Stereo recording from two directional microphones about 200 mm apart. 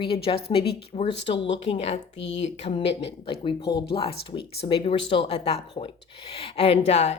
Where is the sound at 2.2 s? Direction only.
65° left (ahead or behind).